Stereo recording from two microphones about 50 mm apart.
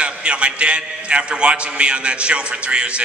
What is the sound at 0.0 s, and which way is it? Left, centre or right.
A man's voice, right.